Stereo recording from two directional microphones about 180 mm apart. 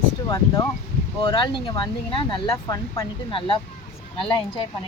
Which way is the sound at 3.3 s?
30° left (ahead or behind).